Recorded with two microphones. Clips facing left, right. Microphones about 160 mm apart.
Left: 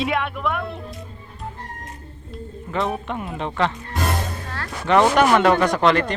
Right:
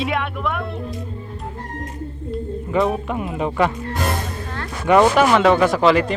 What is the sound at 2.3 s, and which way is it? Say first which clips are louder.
Speech: right 6 dB; centre (ahead or behind).